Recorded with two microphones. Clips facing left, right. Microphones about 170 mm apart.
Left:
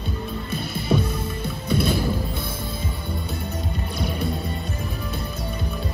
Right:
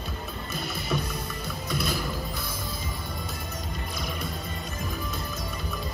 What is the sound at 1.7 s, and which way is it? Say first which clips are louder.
Music: left 8 dB; 30° left (ahead or behind).